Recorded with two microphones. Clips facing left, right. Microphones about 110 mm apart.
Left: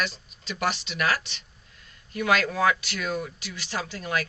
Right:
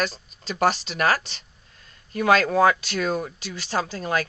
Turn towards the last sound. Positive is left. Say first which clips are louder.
# right 5 dB
turn(degrees=-35)  # may be behind; listen again after turning